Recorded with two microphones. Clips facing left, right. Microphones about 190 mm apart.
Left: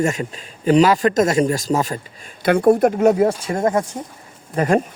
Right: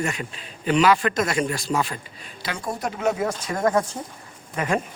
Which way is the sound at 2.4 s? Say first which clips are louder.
Left 15 dB; 60° left (ahead or behind).